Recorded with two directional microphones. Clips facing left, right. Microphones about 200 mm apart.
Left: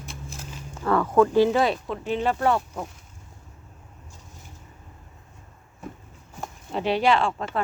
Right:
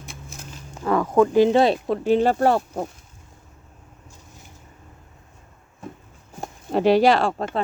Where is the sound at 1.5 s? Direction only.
30° right (ahead or behind).